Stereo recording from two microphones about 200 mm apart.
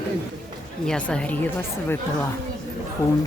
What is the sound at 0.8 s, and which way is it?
Speech, 5° left (ahead or behind).